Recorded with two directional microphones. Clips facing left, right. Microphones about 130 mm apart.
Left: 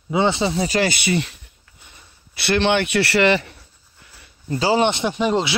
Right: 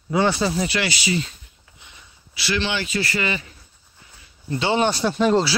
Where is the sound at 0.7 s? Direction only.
40° left (ahead or behind).